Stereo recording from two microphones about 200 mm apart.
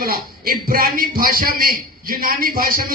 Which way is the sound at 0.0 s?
45° right (ahead or behind).